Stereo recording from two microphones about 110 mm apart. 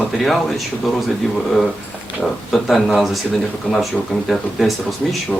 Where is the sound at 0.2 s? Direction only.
Centre (ahead or behind).